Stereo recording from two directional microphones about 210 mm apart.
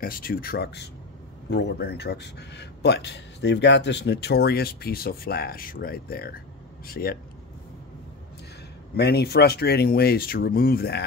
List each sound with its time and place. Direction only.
0.0 s speech: 45° left (ahead or behind)
8.9 s speech: 50° left (ahead or behind)